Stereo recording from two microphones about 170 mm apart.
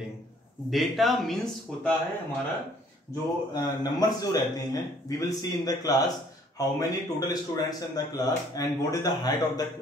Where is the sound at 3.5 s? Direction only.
25° left (ahead or behind).